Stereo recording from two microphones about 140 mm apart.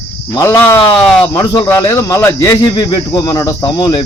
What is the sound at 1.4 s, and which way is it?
Speech, 25° left (ahead or behind).